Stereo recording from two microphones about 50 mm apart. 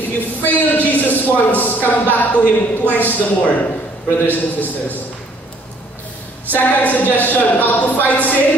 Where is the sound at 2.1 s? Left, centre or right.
Left.